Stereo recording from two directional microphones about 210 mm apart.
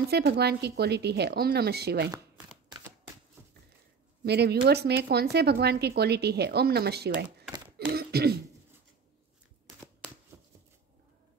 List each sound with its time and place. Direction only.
0.1 s a woman's voice: 50° right (ahead or behind)
4.2 s a woman's voice: 50° right (ahead or behind)
7.9 s a sound: 50° right (ahead or behind)
10.3 s shuffling cards: 10° right (ahead or behind)